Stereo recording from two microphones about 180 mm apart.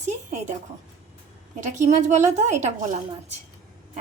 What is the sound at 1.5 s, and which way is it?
A woman's voice, 40° right (ahead or behind).